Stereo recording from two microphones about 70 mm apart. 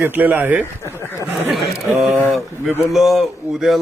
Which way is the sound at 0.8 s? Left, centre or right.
Left.